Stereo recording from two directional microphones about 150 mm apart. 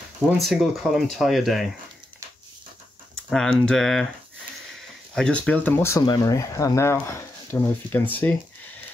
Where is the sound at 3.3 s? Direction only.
5° left (ahead or behind).